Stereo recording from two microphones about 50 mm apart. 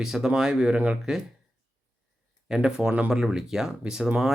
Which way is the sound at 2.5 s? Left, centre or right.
Centre.